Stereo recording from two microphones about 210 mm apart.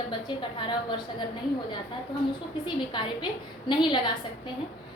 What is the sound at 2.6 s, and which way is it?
A woman's voice, 20° left (ahead or behind).